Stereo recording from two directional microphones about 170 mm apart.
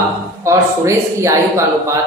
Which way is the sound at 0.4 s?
15° right (ahead or behind).